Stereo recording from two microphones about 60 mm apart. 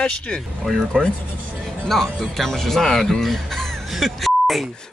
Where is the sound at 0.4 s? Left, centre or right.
Centre.